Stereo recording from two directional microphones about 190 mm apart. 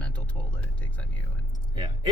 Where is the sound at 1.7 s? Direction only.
25° right (ahead or behind).